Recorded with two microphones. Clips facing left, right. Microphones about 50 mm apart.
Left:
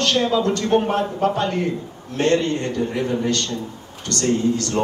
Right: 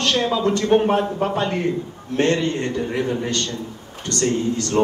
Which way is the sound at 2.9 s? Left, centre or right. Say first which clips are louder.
Left 1 dB; centre.